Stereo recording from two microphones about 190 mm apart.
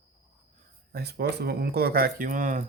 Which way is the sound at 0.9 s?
60° right (ahead or behind).